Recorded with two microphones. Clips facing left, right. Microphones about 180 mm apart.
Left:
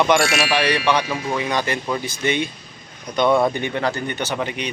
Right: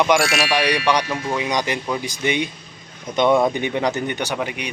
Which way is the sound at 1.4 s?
15° right (ahead or behind).